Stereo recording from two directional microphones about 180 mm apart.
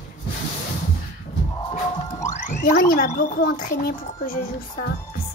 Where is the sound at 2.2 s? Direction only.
50° left (ahead or behind).